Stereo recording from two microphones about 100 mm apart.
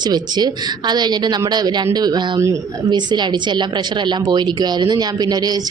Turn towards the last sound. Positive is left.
turn(degrees=-40)  # may be behind; listen again after turning